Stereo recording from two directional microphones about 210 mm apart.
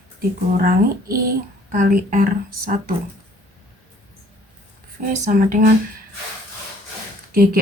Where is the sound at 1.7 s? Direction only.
40° right (ahead or behind).